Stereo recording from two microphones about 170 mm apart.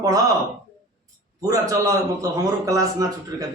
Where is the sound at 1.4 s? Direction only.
20° right (ahead or behind).